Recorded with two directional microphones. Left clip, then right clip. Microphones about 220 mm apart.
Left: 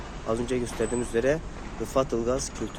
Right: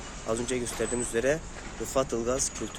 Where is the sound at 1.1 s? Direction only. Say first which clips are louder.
Left 1 dB; 10° right (ahead or behind).